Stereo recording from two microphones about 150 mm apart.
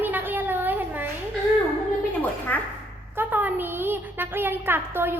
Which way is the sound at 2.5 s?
10° left (ahead or behind).